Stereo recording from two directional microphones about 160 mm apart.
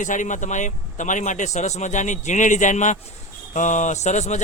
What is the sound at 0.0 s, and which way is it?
Speech, 50° left (ahead or behind).